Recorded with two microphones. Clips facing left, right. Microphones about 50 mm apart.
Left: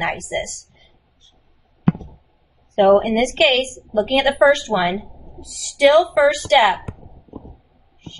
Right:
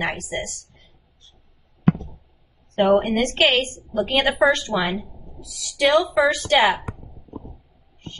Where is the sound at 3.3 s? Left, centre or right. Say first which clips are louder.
Left 2 dB; left.